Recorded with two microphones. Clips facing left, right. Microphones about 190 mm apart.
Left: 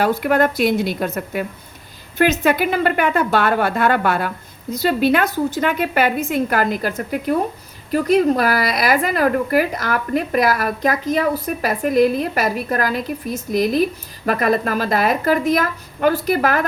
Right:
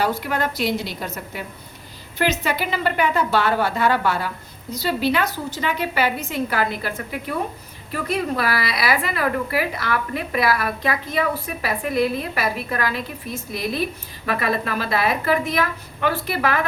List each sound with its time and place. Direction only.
0.0 s a woman's voice: 55° left (ahead or behind)